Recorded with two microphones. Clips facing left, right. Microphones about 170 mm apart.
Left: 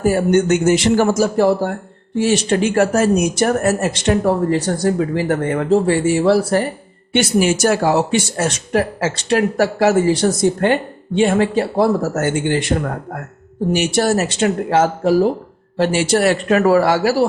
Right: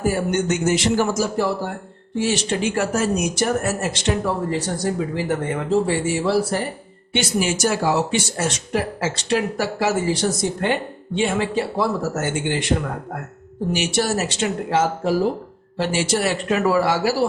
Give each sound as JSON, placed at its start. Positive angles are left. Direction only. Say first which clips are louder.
{"t": 0.1, "sound": "speech", "louder": "left 10 dB", "side_deg": 55}